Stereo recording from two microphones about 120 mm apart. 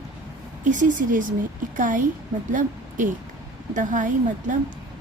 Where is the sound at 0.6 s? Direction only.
90° right.